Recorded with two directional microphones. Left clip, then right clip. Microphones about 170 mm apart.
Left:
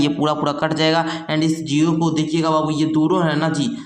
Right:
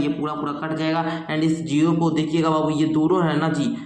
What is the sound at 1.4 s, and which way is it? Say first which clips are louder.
A man's voice: left 2 dB; 20° left (ahead or behind).